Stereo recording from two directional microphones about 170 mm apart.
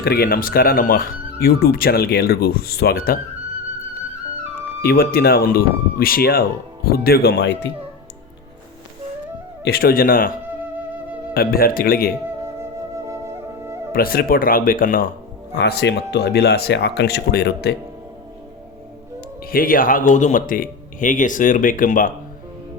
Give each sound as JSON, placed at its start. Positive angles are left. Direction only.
{"t": 0.0, "sound": "speech", "side_deg": 65}
{"t": 4.8, "sound": "speech", "side_deg": 65}
{"t": 9.6, "sound": "speech", "side_deg": 65}
{"t": 11.3, "sound": "speech", "side_deg": 60}
{"t": 13.1, "sound": "flute", "side_deg": -15}
{"t": 13.9, "sound": "speech", "side_deg": 60}
{"t": 15.5, "sound": "speech", "side_deg": 85}
{"t": 19.5, "sound": "speech", "side_deg": 55}